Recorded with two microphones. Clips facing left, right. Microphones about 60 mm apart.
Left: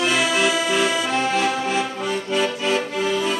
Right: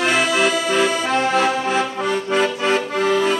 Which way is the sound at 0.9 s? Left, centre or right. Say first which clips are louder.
Right 2 dB; right.